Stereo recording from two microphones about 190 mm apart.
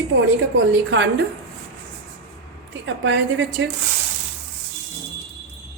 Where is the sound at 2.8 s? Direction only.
75° right (ahead or behind).